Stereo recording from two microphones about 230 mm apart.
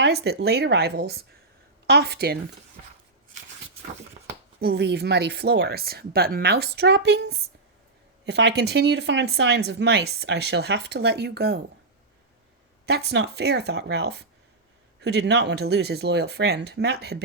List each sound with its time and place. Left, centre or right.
0.0 s speech: right
4.6 s speech: right
12.8 s speech: right